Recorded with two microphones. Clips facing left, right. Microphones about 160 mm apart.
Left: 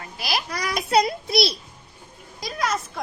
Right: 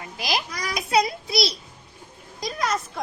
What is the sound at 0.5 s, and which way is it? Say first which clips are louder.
Child singing: left 3 dB; 60° left (ahead or behind).